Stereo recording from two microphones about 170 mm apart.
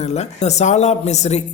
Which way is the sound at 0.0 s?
40° left (ahead or behind).